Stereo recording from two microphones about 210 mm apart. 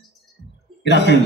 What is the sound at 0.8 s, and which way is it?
Speech, 55° left (ahead or behind).